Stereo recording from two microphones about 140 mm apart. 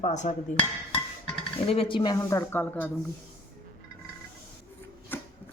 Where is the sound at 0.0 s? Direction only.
55° left (ahead or behind).